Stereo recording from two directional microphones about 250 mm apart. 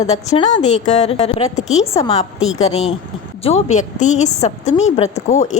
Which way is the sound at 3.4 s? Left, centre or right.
Left.